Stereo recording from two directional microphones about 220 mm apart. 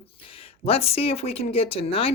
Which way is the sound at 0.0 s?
25° left (ahead or behind).